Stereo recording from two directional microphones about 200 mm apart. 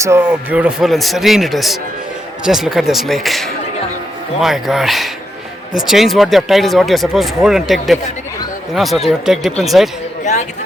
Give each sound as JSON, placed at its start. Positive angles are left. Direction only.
{"t": 0.0, "sound": "speech", "side_deg": -10}